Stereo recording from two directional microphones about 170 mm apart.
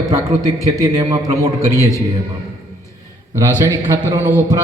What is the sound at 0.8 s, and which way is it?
Speech, 20° right (ahead or behind).